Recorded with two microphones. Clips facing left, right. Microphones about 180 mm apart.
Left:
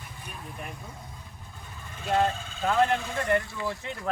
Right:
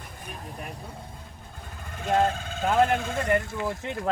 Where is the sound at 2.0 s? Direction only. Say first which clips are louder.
Right 2 dB; 60° right (ahead or behind).